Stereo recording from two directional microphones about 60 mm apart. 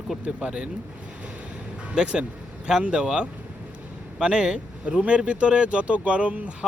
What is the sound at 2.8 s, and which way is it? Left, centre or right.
Speech, centre.